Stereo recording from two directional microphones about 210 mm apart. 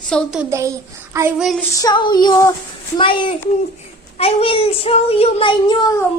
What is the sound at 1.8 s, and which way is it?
Speech, 20° left (ahead or behind).